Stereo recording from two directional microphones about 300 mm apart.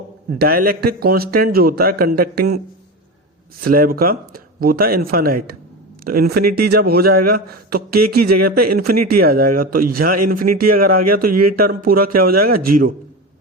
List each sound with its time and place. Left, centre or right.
0.3 s a man's voice: right
3.6 s speech: right
6.4 s speech: right
6.7 s a man's voice: right
8.0 s speech: right
8.7 s a man's voice: right
10.4 s speech: right
10.7 s speech: right